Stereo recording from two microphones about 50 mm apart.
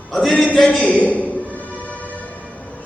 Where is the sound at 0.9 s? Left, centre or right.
Left.